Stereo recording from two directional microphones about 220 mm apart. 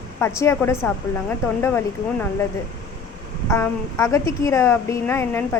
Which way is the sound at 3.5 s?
10° left (ahead or behind).